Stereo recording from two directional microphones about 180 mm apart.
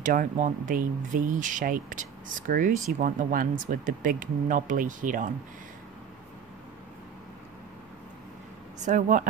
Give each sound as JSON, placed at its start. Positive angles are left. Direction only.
{"t": 0.0, "sound": "speech", "side_deg": -50}
{"t": 8.7, "sound": "speech", "side_deg": -45}